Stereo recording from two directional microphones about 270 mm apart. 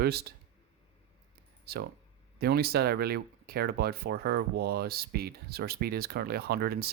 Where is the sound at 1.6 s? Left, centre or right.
Right.